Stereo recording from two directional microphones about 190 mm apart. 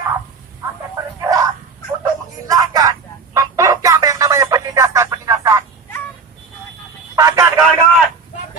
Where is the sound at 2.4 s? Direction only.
20° right (ahead or behind).